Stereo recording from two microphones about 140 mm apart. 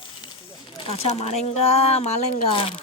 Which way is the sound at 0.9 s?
45° left (ahead or behind).